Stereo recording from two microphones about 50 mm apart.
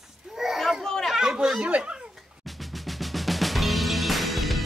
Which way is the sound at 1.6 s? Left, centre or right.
Right.